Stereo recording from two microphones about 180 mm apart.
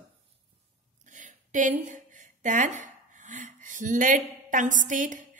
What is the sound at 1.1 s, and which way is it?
A woman's voice, 45° right (ahead or behind).